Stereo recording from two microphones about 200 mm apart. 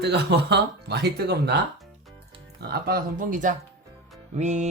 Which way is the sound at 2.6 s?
50° right (ahead or behind).